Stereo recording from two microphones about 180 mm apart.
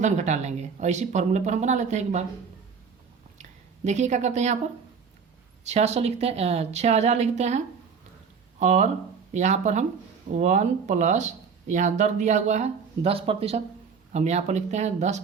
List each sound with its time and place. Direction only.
0.0 s speech: 40° right (ahead or behind)
3.8 s speech: 40° right (ahead or behind)
5.6 s speech: 40° right (ahead or behind)